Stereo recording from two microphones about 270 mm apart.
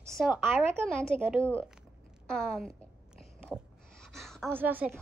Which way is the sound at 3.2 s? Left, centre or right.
Centre.